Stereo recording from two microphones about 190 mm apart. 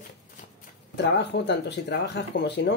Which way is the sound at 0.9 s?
60° left (ahead or behind).